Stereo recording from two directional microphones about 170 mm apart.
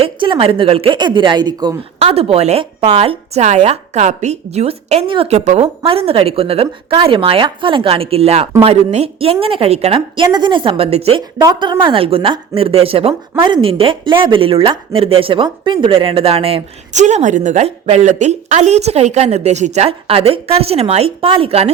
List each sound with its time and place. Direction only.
0.0 s speech: 30° right (ahead or behind)
11.3 s speech: 25° right (ahead or behind)